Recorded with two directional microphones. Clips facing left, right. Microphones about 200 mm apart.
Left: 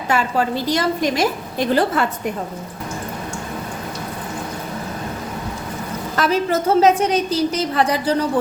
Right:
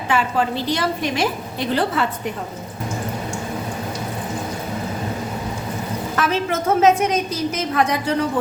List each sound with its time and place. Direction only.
0.1 s a woman's voice: 40° left (ahead or behind)
6.1 s a woman's voice: 35° left (ahead or behind)